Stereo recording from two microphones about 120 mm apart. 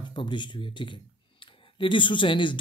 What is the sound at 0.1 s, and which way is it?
Speech, 40° left (ahead or behind).